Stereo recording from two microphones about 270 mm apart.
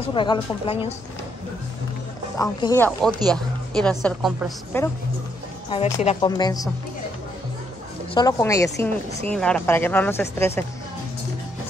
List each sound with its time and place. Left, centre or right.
0.1 s a woman's voice: centre
2.3 s a woman's voice: centre
5.7 s speech: left
8.1 s speech: centre